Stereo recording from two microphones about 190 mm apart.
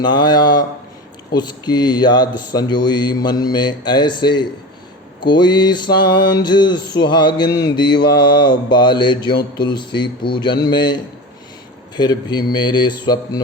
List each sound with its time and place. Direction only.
0.0 s speech: 25° left (ahead or behind)
11.9 s speech: 20° left (ahead or behind)